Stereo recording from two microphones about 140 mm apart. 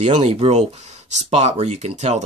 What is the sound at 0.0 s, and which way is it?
Speech, 50° right (ahead or behind).